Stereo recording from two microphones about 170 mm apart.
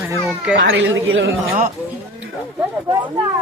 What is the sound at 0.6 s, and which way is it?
Speech, 90° right.